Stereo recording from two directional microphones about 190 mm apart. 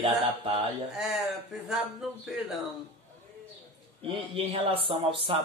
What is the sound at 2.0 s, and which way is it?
Speech, centre (ahead or behind).